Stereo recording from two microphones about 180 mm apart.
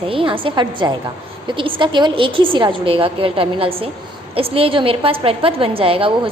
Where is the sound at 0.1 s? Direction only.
30° right (ahead or behind).